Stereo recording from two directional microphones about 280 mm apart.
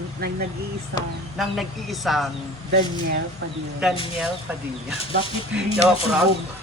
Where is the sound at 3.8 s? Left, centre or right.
Centre.